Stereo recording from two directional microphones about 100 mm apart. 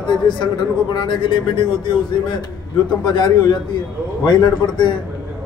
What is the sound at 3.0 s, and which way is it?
Speech, 50° left (ahead or behind).